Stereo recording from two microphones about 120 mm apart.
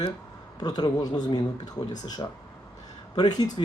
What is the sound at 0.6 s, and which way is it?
Speech, 35° left (ahead or behind).